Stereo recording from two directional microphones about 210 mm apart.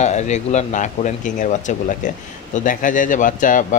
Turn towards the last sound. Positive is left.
turn(degrees=40)  # may be behind; listen again after turning